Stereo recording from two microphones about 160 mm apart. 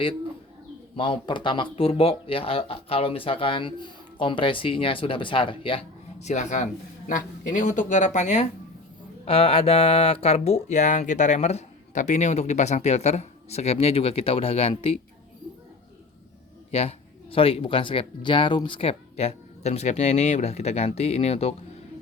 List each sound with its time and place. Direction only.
0.9 s speech: 35° left (ahead or behind)
16.7 s speech: 40° left (ahead or behind)